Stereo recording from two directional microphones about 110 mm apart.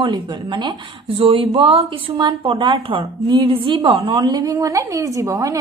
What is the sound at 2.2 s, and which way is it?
A woman's voice, 45° right (ahead or behind).